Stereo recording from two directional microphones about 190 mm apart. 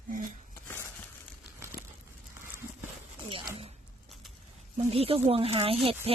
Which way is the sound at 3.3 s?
30° right (ahead or behind).